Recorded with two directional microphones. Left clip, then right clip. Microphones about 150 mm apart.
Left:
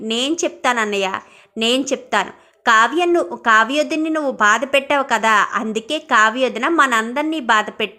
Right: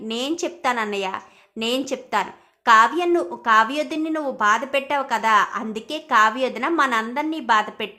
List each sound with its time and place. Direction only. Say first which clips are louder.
0.1 s a woman's voice: left 6 dB; 15° left (ahead or behind)